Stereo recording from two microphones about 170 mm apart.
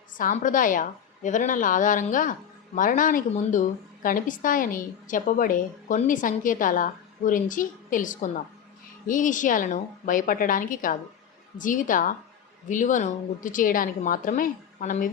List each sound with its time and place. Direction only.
0.2 s a woman's voice: 50° left (ahead or behind)